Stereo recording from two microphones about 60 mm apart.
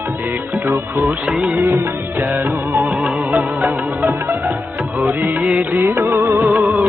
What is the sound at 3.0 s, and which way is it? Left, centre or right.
Music, right.